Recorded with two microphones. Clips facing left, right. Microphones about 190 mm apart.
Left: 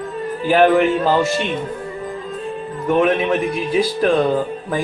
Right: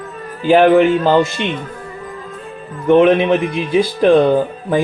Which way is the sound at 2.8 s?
25° right (ahead or behind).